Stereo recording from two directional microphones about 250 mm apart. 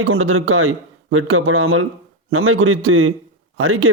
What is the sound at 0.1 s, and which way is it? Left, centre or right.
Speech, right.